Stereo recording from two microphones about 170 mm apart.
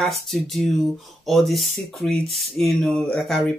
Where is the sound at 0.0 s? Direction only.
Centre (ahead or behind).